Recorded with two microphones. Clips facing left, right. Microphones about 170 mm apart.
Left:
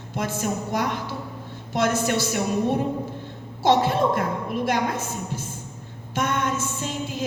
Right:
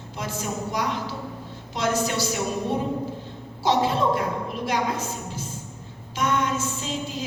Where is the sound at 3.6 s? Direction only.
50° left (ahead or behind).